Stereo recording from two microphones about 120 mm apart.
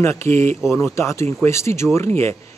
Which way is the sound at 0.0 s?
20° left (ahead or behind).